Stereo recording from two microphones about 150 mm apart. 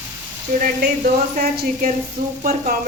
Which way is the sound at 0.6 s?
65° right (ahead or behind).